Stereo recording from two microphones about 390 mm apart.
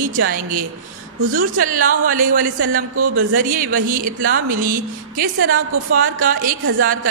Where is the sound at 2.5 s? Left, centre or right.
Right.